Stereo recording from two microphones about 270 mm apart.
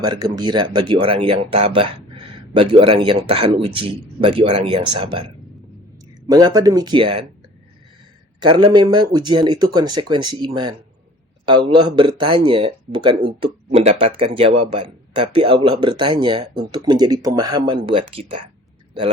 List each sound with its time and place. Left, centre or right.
0.0 s speech: centre
6.2 s a man's voice: centre
8.4 s a man's voice: centre